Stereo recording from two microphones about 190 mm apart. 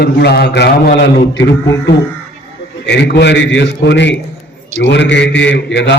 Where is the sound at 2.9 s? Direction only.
65° left (ahead or behind).